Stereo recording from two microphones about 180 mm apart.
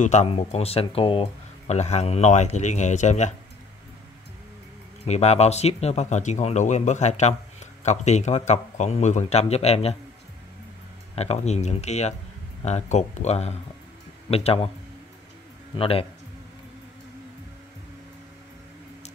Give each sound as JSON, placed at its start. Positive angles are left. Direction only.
{"t": 0.0, "sound": "speech", "side_deg": 40}
{"t": 5.0, "sound": "speech", "side_deg": 35}
{"t": 11.1, "sound": "speech", "side_deg": 35}
{"t": 15.7, "sound": "speech", "side_deg": 30}